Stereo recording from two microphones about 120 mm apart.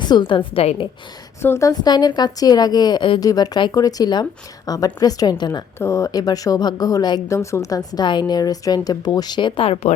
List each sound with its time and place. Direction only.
0.0 s a woman's voice: 40° left (ahead or behind)
1.4 s a woman's voice: 20° left (ahead or behind); by 9.9 s 55° left (ahead or behind)